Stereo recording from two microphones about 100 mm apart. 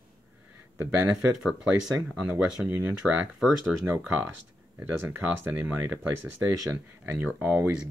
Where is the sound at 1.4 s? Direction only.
5° right (ahead or behind).